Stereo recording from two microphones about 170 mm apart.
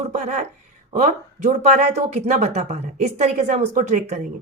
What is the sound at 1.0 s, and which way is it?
Speech, 45° right (ahead or behind).